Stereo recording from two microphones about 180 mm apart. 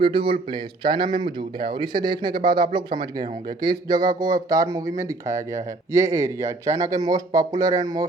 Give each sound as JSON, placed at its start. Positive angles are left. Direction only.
{"t": 0.0, "sound": "speech", "side_deg": -30}